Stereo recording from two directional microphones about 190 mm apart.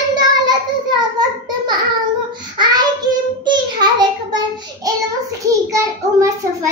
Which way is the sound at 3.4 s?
25° right (ahead or behind).